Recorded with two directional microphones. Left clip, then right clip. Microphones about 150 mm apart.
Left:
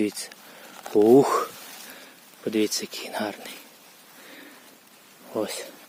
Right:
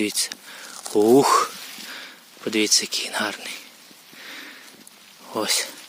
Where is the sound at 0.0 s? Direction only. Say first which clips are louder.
Right 4 dB; 10° left (ahead or behind).